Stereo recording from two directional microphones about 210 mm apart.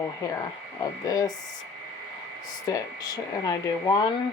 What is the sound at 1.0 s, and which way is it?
Speech, 15° left (ahead or behind).